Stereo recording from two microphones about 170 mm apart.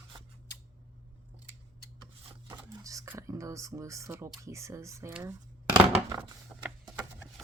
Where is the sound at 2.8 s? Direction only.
20° right (ahead or behind).